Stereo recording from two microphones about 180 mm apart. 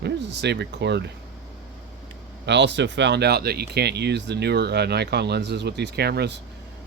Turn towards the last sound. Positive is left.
turn(degrees=-65)  # may be behind; listen again after turning